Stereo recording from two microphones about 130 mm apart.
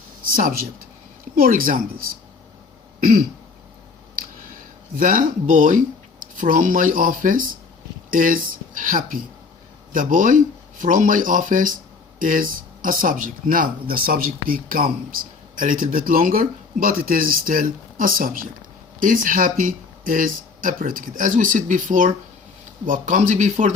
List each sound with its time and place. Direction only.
0.3 s speech: 90° right
4.9 s speech: 90° right
22.9 s speech: 75° right (ahead or behind)